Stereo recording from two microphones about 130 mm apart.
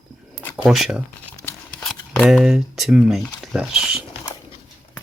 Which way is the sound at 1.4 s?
10° left (ahead or behind).